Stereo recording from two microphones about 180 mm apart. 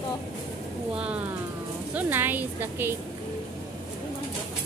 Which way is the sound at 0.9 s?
5° right (ahead or behind).